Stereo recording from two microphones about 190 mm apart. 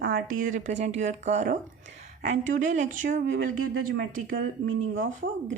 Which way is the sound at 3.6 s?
90° right.